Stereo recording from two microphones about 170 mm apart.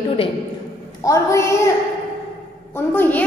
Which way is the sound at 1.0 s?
20° left (ahead or behind).